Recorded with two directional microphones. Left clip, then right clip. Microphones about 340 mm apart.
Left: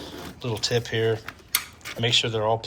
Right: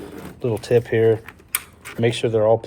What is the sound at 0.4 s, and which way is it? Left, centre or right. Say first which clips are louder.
Speech: right 7 dB; right.